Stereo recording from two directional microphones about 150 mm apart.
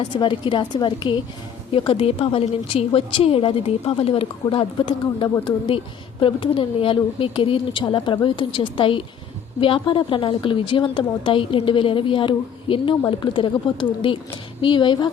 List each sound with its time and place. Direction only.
0.0 s a woman's voice: 30° left (ahead or behind)